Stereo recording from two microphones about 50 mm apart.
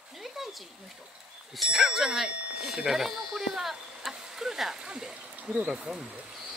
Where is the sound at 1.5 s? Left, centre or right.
Centre.